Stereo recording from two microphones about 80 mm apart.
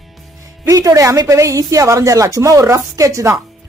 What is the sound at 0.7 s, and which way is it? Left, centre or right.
Speech, right.